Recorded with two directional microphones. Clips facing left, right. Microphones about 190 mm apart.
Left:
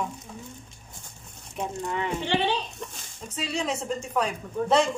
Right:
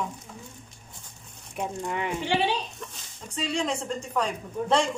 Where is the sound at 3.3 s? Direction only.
5° left (ahead or behind).